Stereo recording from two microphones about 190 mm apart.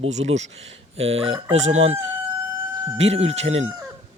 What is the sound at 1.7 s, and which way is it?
Speech, 90° right.